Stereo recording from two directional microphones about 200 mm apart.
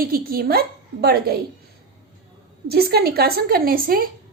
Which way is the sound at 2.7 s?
50° right (ahead or behind).